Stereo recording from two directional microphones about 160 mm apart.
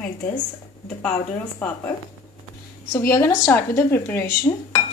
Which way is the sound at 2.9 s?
20° left (ahead or behind).